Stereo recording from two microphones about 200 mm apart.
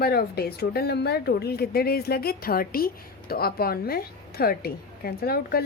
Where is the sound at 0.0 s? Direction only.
50° left (ahead or behind).